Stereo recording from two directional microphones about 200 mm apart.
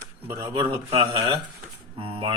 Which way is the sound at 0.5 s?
25° right (ahead or behind).